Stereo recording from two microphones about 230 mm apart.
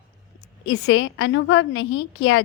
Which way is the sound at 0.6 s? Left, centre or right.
Left.